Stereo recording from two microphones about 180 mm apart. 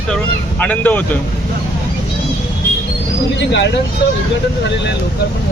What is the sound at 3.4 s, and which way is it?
Speech, 75° left (ahead or behind).